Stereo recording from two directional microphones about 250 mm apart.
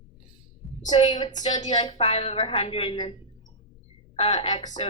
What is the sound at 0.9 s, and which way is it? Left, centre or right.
A woman's voice, centre.